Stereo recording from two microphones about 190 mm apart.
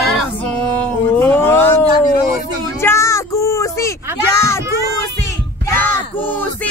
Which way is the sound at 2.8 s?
15° left (ahead or behind).